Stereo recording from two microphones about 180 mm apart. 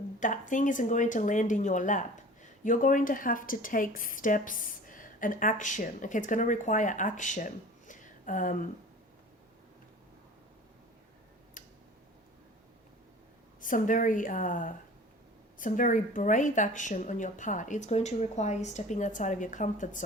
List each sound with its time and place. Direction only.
0.2 s speech: 45° left (ahead or behind)
13.6 s speech: 45° left (ahead or behind)